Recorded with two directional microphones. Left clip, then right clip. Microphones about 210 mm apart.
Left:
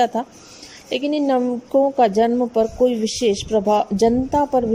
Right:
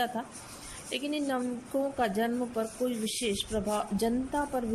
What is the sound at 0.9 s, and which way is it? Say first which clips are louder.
Speech: left 13 dB; 40° left (ahead or behind).